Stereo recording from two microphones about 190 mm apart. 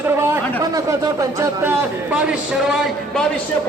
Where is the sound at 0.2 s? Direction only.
15° right (ahead or behind); by 3.2 s centre (ahead or behind).